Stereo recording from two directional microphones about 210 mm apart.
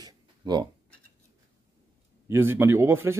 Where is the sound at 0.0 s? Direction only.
20° right (ahead or behind).